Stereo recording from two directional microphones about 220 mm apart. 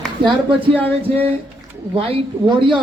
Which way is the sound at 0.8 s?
10° left (ahead or behind).